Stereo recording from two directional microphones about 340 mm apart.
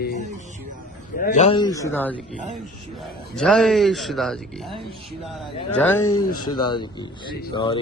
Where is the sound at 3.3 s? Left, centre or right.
Centre.